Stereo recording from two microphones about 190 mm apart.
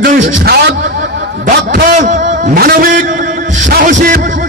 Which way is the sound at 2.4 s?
50° right (ahead or behind).